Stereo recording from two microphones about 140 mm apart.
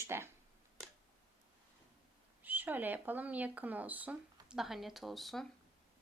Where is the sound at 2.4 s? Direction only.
15° right (ahead or behind).